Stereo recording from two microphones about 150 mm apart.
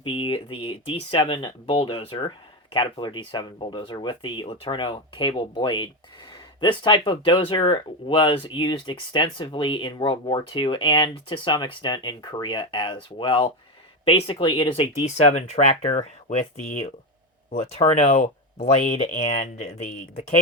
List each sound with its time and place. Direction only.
0.0 s speech: 35° left (ahead or behind)
15.0 s speech: 50° left (ahead or behind)
17.5 s speech: 50° left (ahead or behind)